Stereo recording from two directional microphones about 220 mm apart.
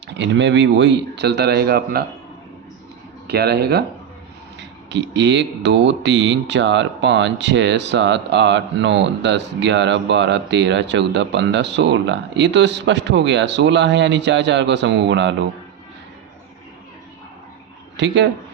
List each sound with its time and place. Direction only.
0.1 s speech: 55° right (ahead or behind)
3.2 s speech: 45° right (ahead or behind)
4.9 s speech: 55° right (ahead or behind)
17.9 s speech: 55° right (ahead or behind)